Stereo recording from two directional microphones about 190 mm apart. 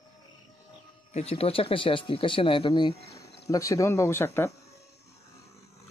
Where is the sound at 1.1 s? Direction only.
35° left (ahead or behind); by 4.5 s 10° left (ahead or behind).